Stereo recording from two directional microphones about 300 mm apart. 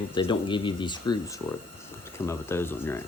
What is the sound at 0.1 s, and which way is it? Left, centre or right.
Speech, centre.